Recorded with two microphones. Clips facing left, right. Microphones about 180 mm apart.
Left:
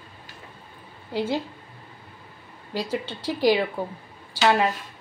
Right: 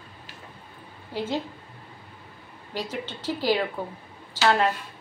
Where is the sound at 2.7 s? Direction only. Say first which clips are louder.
Left 4 dB; 10° left (ahead or behind).